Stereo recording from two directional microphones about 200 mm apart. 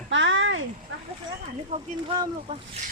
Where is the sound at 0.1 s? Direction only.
70° right (ahead or behind).